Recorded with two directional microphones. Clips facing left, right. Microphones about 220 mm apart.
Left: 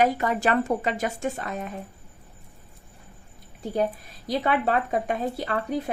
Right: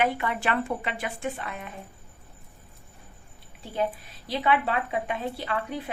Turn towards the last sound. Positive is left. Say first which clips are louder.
# left 4 dB
turn(degrees=40)  # may be behind; listen again after turning